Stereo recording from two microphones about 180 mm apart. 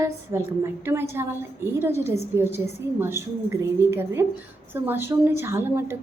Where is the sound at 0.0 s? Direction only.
15° right (ahead or behind).